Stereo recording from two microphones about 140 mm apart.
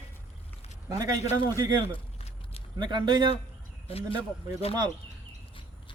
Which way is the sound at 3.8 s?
45° left (ahead or behind).